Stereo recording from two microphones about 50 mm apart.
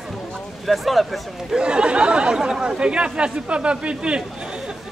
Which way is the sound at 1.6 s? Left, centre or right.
Centre.